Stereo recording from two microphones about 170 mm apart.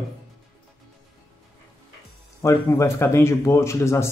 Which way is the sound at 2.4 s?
15° left (ahead or behind).